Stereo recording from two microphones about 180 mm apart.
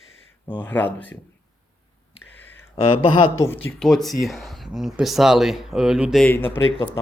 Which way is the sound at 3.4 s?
10° left (ahead or behind).